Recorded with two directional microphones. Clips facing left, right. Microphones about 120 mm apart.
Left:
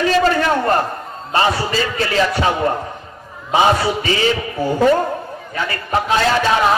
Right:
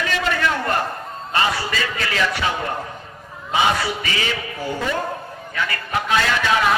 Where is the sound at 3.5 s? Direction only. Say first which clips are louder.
Left 5 dB; 35° left (ahead or behind).